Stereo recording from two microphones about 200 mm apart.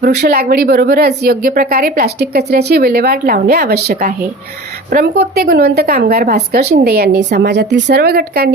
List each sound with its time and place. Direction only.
0.0 s speech: 50° right (ahead or behind)